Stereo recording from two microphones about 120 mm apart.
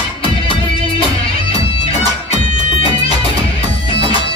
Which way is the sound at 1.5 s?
60° left (ahead or behind).